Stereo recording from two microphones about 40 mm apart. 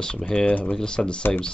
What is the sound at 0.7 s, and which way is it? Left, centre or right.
Speech, centre.